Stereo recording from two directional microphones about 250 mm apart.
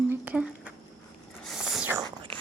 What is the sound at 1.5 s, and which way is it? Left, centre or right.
Whispering, centre.